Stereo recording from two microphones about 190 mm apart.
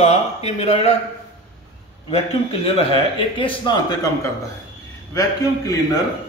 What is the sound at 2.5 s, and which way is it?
Speech, 30° left (ahead or behind).